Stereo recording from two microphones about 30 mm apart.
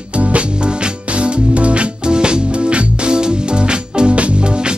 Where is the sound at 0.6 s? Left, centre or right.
Right.